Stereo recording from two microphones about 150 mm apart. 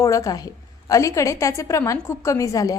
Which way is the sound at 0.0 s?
20° left (ahead or behind).